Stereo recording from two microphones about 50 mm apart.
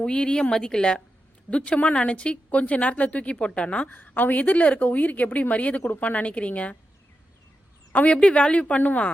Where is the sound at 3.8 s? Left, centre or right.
Left.